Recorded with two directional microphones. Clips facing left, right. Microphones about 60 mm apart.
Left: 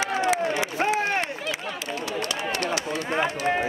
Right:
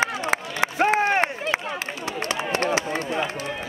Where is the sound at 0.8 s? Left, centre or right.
Right.